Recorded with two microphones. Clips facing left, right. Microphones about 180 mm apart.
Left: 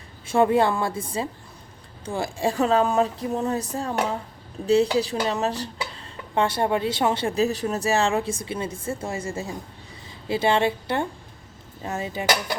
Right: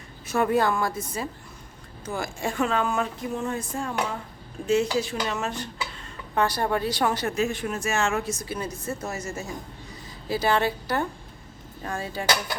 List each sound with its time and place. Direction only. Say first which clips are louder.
0.3 s a woman's voice: left 3 dB; 25° left (ahead or behind)